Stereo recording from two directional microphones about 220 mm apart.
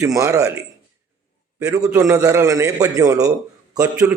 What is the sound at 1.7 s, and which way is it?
A man's voice, 15° right (ahead or behind).